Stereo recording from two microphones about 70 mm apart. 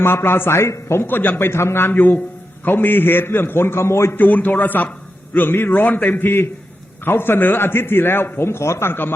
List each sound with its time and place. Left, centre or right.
0.0 s a man's voice: left
4.2 s a man's voice: left